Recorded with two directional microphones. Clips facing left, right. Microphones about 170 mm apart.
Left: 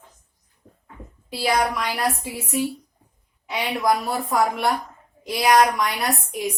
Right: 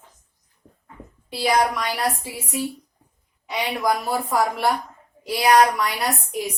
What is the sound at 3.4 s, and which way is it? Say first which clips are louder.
A woman's voice: left 1 dB; centre (ahead or behind).